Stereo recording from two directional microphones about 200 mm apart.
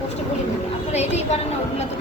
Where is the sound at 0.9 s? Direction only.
30° left (ahead or behind).